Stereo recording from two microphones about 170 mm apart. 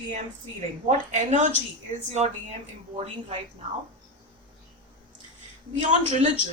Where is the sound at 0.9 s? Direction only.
40° right (ahead or behind).